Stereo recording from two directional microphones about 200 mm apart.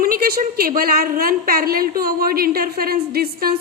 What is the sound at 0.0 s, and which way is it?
A woman's voice, 45° right (ahead or behind).